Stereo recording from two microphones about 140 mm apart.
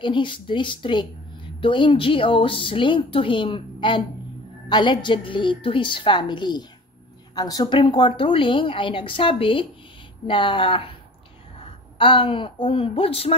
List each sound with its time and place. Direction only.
0.0 s a woman's voice: 35° left (ahead or behind)